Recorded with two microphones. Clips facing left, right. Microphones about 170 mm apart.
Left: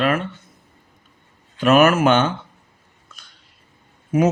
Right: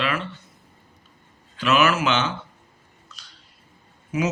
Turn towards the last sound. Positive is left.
turn(degrees=50)  # may be behind; listen again after turning